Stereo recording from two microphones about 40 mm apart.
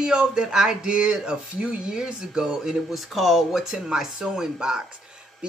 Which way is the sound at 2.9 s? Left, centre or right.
Centre.